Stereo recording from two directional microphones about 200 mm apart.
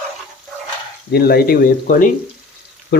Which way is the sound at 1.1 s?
50° left (ahead or behind).